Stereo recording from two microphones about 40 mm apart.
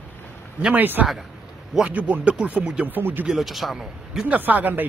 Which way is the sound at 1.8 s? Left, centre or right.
Right.